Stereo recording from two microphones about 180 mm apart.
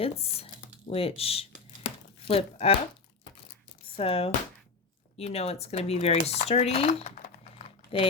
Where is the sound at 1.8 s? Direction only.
35° left (ahead or behind).